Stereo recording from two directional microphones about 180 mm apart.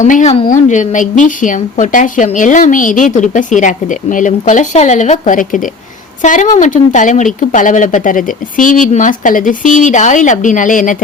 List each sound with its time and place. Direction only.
0.0 s speech: 45° left (ahead or behind)